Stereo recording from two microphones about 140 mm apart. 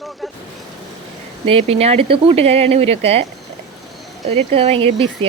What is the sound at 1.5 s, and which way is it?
Speech, 45° right (ahead or behind).